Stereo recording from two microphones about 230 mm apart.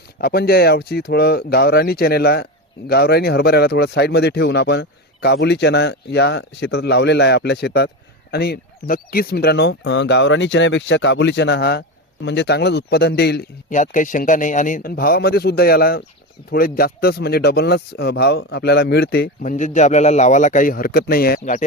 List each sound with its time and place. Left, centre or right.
0.2 s speech: left